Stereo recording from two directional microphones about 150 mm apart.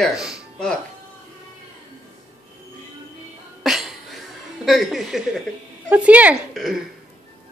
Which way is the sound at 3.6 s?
Centre (ahead or behind).